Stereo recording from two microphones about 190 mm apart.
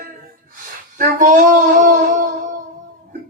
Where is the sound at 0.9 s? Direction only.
45° right (ahead or behind).